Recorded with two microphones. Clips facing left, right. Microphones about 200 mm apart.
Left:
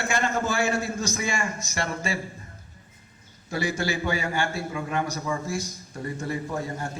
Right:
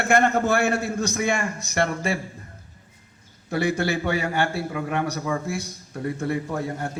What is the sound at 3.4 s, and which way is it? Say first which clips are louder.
A man's voice: right 4 dB; 60° right (ahead or behind).